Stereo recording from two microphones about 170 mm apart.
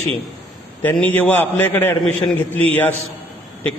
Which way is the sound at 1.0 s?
10° left (ahead or behind).